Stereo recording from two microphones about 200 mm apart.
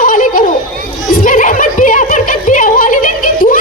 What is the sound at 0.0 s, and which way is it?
Children playing, 40° left (ahead or behind).